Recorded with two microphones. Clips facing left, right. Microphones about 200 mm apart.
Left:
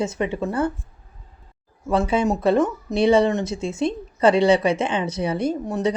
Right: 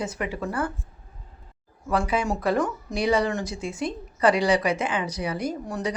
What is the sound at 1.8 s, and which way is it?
Speech, 25° left (ahead or behind).